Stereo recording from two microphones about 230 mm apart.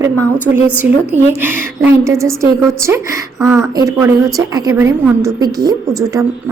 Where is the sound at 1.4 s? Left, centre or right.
Centre.